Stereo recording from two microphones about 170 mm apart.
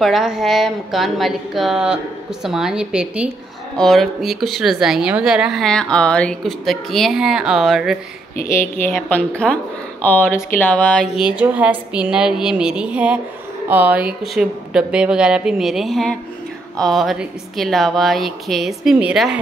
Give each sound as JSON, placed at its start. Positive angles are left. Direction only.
{"t": 0.0, "sound": "a woman's voice", "side_deg": 0}
{"t": 8.5, "sound": "a woman's voice", "side_deg": 15}